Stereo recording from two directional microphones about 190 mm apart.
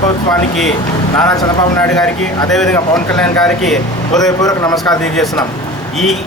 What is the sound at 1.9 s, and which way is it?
A man's voice, 5° left (ahead or behind).